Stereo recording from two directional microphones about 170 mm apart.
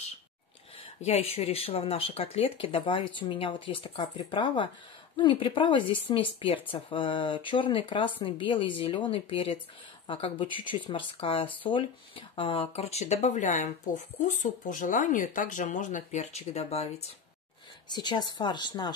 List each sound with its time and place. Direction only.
1.0 s speech: 35° left (ahead or behind)
17.8 s speech: 25° left (ahead or behind)